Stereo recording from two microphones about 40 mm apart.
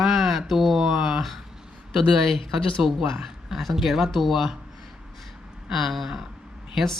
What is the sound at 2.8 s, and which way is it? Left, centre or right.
Speech, centre.